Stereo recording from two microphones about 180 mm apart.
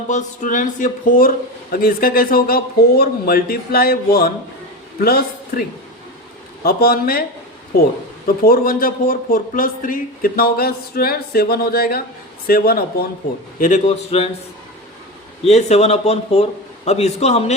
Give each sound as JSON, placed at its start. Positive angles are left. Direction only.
{"t": 0.1, "sound": "a sound", "side_deg": 45}
{"t": 1.7, "sound": "a man's voice", "side_deg": 55}
{"t": 8.4, "sound": "speech", "side_deg": 55}
{"t": 13.6, "sound": "speech", "side_deg": 40}
{"t": 15.4, "sound": "speech", "side_deg": 35}